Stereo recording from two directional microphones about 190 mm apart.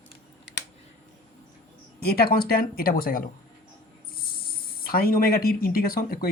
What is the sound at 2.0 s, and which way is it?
Speech, 55° left (ahead or behind).